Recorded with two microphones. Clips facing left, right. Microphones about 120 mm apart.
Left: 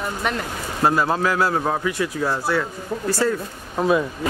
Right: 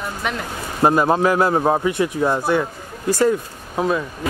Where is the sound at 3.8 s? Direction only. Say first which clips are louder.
Left 1 dB; 5° left (ahead or behind).